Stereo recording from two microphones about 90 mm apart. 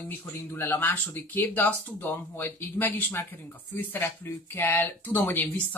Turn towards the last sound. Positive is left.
turn(degrees=20)  # may be behind; listen again after turning